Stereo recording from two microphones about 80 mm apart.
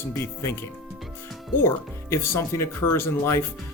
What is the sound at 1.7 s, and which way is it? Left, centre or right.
Speech, left.